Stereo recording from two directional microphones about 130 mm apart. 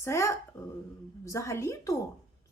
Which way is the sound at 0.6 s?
25° left (ahead or behind).